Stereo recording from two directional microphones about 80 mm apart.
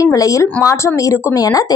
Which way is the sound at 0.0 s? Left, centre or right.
Left.